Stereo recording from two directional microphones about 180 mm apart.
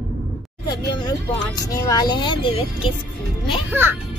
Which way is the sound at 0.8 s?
25° left (ahead or behind).